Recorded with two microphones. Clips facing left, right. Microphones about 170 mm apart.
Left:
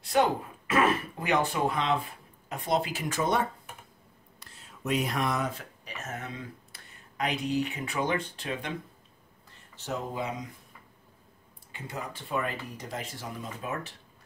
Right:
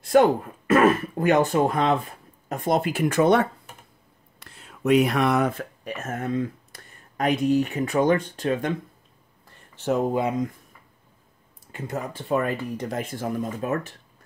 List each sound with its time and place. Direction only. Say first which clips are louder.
0.1 s speech: right 8 dB; 50° right (ahead or behind)
9.8 s speech: right 11 dB; 55° right (ahead or behind)
11.7 s speech: right 7 dB; 45° right (ahead or behind)